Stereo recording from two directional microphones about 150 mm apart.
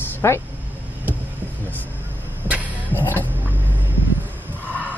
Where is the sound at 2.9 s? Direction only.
15° left (ahead or behind).